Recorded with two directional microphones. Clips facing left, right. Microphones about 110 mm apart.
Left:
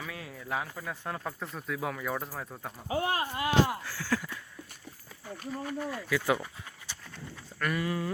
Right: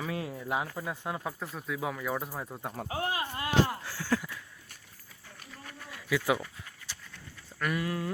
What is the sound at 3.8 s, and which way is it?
Speech, 20° right (ahead or behind).